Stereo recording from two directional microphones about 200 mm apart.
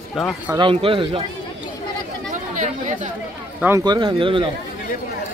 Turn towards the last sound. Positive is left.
turn(degrees=-25)  # may be behind; listen again after turning